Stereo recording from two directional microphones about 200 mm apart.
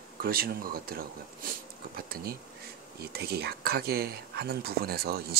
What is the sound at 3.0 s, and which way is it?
Speech, 50° right (ahead or behind).